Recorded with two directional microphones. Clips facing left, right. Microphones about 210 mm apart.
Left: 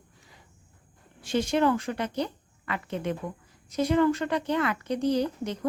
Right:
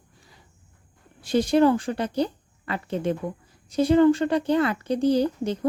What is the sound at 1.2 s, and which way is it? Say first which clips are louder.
Speech: right 5 dB; 35° right (ahead or behind).